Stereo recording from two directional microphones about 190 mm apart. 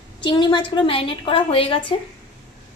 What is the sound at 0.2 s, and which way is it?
A woman's voice, 25° left (ahead or behind).